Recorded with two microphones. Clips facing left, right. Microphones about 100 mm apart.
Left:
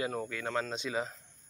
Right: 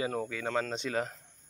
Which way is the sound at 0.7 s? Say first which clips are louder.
Right 2 dB; 65° right (ahead or behind).